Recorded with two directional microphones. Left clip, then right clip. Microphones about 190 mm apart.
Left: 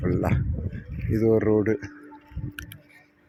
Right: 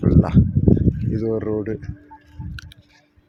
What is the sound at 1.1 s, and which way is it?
Speech, 15° left (ahead or behind).